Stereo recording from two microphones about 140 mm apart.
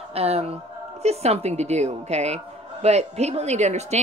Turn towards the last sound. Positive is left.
turn(degrees=-55)  # may be behind; listen again after turning